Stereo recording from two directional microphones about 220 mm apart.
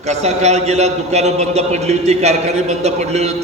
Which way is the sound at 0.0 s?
30° right (ahead or behind).